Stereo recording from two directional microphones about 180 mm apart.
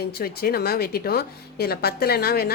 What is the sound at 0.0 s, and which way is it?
A woman's voice, 60° left (ahead or behind).